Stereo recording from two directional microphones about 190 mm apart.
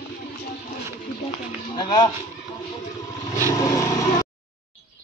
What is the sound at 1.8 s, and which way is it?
Speech, 20° left (ahead or behind).